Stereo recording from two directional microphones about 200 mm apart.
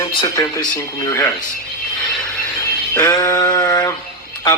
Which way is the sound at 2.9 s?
15° left (ahead or behind).